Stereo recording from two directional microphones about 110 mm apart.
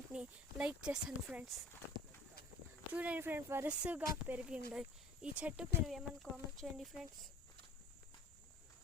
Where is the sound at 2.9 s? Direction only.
15° right (ahead or behind).